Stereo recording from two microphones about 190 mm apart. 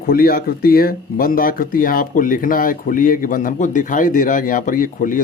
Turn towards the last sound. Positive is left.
turn(degrees=45)  # may be behind; listen again after turning